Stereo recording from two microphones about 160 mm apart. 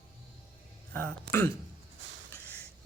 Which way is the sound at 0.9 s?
15° left (ahead or behind).